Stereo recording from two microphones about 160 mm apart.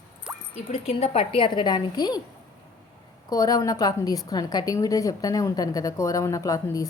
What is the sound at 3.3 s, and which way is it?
A woman's voice, 20° left (ahead or behind).